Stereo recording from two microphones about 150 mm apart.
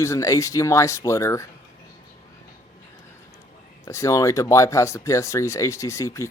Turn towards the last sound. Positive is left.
turn(degrees=20)  # may be behind; listen again after turning